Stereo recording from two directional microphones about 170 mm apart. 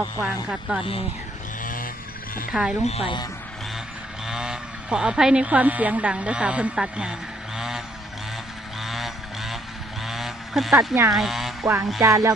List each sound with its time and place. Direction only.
0.2 s speech: 5° right (ahead or behind)
1.6 s vehicle: 55° left (ahead or behind)
2.5 s speech: 5° right (ahead or behind)
2.8 s speech: 35° left (ahead or behind)
4.3 s speech: 5° right (ahead or behind)
8.8 s a sound: centre (ahead or behind)
10.1 s vehicle: centre (ahead or behind)
11.1 s speech: centre (ahead or behind)
11.6 s music: 15° right (ahead or behind)